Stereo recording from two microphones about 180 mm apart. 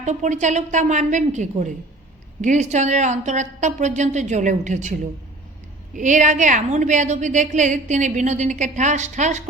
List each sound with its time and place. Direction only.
0.0 s a woman's voice: 40° right (ahead or behind)
6.0 s a woman's voice: 45° right (ahead or behind)